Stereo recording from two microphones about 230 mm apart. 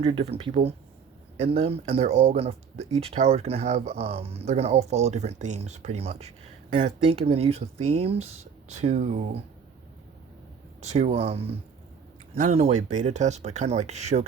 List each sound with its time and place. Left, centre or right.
0.0 s speech: right
10.8 s speech: right